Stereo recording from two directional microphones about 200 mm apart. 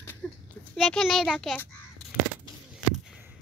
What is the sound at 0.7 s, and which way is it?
Speech, centre (ahead or behind).